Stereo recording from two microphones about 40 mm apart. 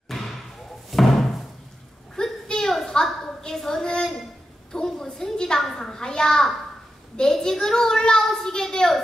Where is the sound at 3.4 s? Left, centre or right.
Centre.